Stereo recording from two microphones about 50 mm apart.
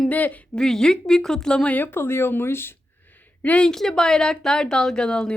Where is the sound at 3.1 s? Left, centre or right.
Left.